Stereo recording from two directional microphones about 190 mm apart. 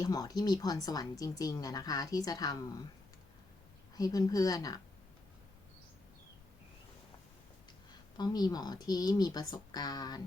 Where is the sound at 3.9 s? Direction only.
20° left (ahead or behind).